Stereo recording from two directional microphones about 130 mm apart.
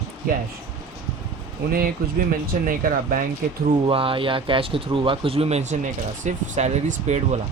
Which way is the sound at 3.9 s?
45° right (ahead or behind).